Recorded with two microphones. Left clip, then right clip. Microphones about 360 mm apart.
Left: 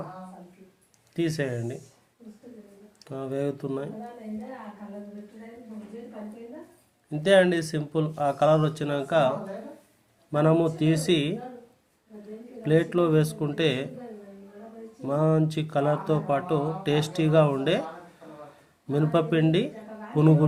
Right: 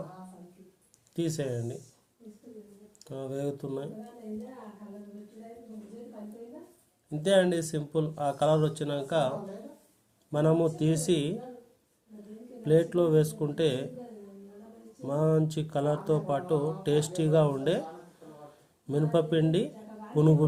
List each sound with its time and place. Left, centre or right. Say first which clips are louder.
1.1 s speech: left 4 dB; right
3.0 s speech: left 5 dB; right
7.1 s speech: left 5 dB; right
10.3 s speech: left 3 dB; right
12.6 s speech: left 2 dB; right
15.0 s speech: left 3 dB; right
18.9 s speech: left 3 dB; right